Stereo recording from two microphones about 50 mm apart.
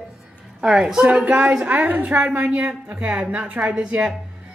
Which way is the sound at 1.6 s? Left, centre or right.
Right.